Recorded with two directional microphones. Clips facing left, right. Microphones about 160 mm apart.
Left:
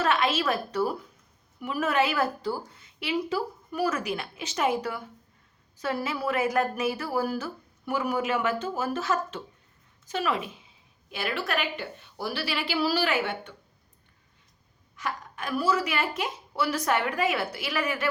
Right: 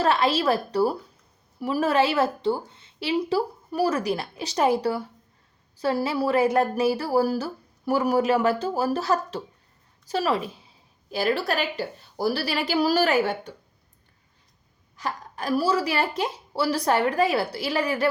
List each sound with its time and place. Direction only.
0.0 s a woman's voice: 35° right (ahead or behind)
14.9 s speech: 35° right (ahead or behind)